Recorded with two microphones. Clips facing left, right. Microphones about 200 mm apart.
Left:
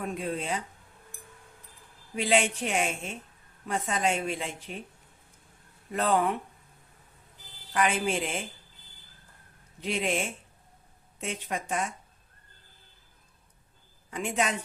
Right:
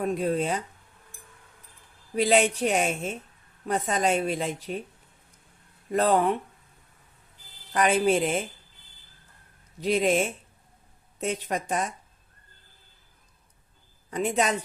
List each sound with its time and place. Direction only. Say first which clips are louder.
0.0 s a woman's voice: right 7 dB; 40° right (ahead or behind)
2.1 s a woman's voice: right 4 dB; 40° right (ahead or behind)
5.9 s a woman's voice: right 4 dB; 40° right (ahead or behind)
7.7 s a woman's voice: right 5 dB; 40° right (ahead or behind)
9.8 s a woman's voice: right 7 dB; 40° right (ahead or behind)
14.1 s a woman's voice: right 4 dB; 40° right (ahead or behind)